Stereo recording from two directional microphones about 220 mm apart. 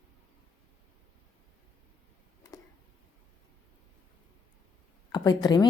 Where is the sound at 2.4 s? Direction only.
15° left (ahead or behind).